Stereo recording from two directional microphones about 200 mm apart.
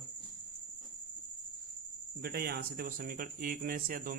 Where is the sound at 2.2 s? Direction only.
50° right (ahead or behind).